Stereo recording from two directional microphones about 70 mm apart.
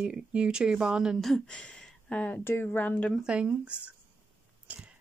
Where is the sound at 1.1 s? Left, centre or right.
Centre.